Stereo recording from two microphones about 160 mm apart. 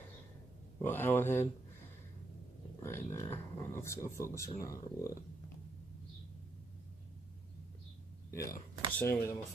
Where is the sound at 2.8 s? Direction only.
15° left (ahead or behind).